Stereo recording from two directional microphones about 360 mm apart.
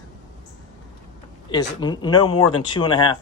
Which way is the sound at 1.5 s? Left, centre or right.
Centre.